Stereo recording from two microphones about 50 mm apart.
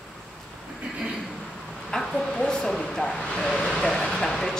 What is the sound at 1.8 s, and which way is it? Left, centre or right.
Speech, centre.